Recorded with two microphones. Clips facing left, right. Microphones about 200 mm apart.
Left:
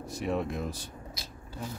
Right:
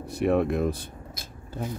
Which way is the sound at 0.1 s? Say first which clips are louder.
Right 8 dB; 60° right (ahead or behind).